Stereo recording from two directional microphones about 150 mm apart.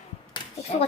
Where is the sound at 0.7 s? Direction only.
45° left (ahead or behind).